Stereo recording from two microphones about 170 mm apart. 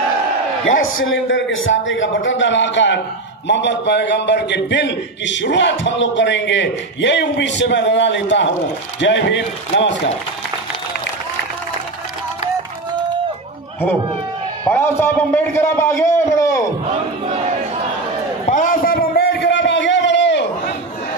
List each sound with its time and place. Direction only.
1.1 s a man's voice: 90° left
14.6 s a man's voice: 15° left (ahead or behind)
18.5 s a sound: 50° left (ahead or behind); by 20.7 s 90° left